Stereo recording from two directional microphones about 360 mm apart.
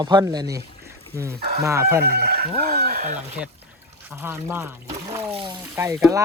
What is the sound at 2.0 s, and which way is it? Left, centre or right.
Chicken, right.